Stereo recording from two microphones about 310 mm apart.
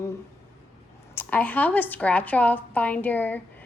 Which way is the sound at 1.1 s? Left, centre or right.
Centre.